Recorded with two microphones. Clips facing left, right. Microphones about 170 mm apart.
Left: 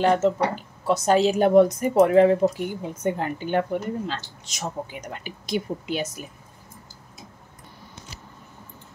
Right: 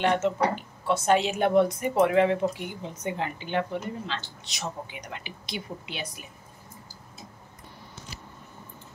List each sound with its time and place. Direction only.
0.0 s a woman's voice: 35° left (ahead or behind)